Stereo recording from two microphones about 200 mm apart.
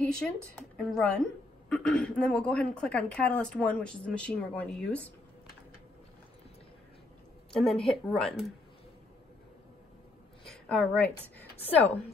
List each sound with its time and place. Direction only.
0.2 s a woman's voice: centre (ahead or behind)
7.5 s a woman's voice: centre (ahead or behind)
10.4 s a sound: 5° left (ahead or behind)
11.5 s a woman's voice: 30° left (ahead or behind)